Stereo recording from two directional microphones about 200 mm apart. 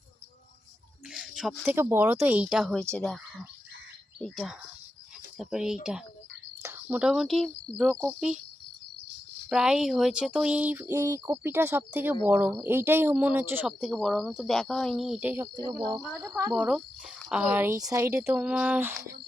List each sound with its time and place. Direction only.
1.1 s speech: 5° right (ahead or behind)
4.2 s speech: centre (ahead or behind)
9.5 s speech: 5° right (ahead or behind)
15.9 s speech: 20° right (ahead or behind)
16.5 s speech: 5° right (ahead or behind)